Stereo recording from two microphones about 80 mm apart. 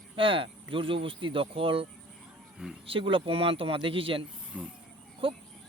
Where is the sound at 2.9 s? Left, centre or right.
Right.